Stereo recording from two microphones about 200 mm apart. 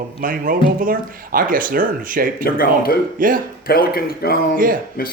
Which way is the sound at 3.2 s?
45° right (ahead or behind).